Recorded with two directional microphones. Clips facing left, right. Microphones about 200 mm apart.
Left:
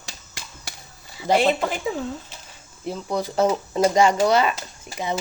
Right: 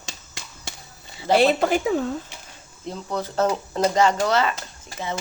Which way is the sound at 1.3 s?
15° left (ahead or behind).